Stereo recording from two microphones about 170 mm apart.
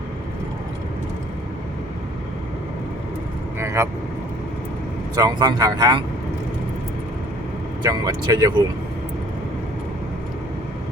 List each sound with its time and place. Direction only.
3.6 s vehicle: 15° right (ahead or behind)
5.1 s speech: 20° right (ahead or behind)
7.8 s speech: 20° right (ahead or behind)